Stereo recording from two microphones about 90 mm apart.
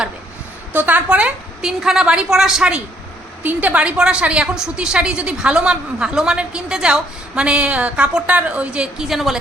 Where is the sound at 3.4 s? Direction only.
20° right (ahead or behind).